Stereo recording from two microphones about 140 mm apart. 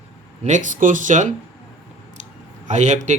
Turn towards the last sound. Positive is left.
turn(degrees=-55)  # may be behind; listen again after turning